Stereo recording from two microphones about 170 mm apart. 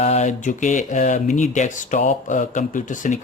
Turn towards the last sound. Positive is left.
turn(degrees=50)  # may be behind; listen again after turning